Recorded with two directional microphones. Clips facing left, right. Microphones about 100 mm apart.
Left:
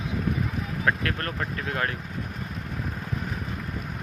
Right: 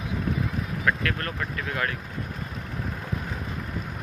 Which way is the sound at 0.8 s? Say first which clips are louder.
Even; 35° left (ahead or behind).